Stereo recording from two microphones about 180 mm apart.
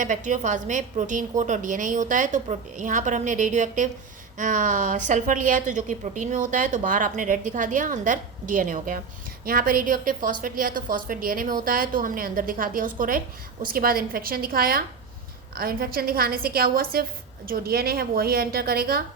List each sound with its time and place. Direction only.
0.0 s a woman's voice: 45° right (ahead or behind)